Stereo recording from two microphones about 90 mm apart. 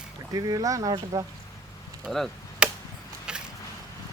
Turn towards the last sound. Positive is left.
turn(degrees=-10)  # may be behind; listen again after turning